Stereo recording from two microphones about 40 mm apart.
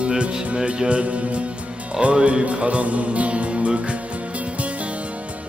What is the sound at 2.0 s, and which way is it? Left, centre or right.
Music, right.